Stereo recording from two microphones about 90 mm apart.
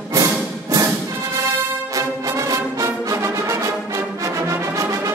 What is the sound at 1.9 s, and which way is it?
Music, 40° right (ahead or behind).